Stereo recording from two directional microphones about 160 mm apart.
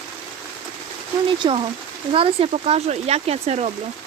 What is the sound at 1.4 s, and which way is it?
Speech, 30° right (ahead or behind).